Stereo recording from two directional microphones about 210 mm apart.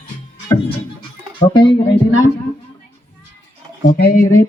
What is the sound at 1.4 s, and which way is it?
Music, 20° left (ahead or behind).